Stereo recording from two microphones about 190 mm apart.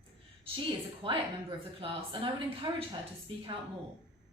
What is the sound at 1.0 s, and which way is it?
A woman's voice, 30° right (ahead or behind).